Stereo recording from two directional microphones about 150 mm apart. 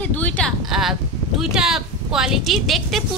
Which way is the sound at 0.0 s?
10° left (ahead or behind).